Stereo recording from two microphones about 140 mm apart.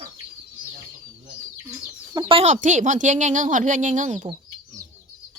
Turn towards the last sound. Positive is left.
turn(degrees=-60)  # may be behind; listen again after turning